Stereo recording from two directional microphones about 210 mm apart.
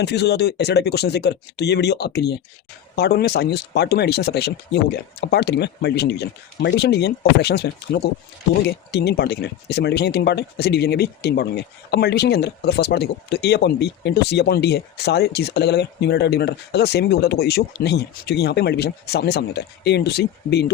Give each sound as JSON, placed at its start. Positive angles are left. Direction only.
{"t": 0.0, "sound": "speech", "side_deg": 50}